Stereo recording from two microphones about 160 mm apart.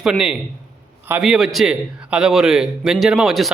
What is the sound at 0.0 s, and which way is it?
A man's voice, 5° right (ahead or behind).